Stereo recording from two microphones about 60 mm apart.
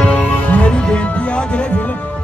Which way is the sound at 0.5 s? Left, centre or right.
Left.